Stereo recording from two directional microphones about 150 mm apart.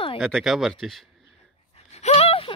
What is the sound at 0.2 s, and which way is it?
Speech, centre (ahead or behind).